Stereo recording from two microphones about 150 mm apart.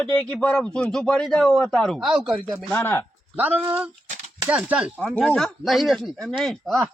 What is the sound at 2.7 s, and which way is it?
Speech, 15° left (ahead or behind).